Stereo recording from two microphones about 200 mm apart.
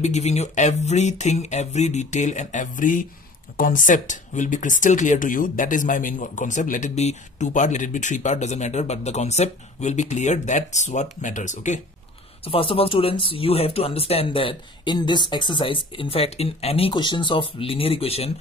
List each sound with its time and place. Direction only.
0.0 s speech: 35° left (ahead or behind)
12.4 s speech: 25° left (ahead or behind)